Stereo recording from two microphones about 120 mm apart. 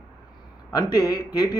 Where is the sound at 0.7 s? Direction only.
35° left (ahead or behind).